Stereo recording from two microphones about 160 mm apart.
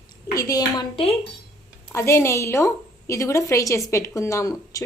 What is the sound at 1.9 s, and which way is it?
A woman's voice, 15° left (ahead or behind).